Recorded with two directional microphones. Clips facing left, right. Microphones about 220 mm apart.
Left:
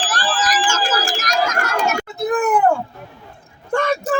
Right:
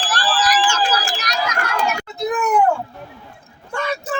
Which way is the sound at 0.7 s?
45° left (ahead or behind).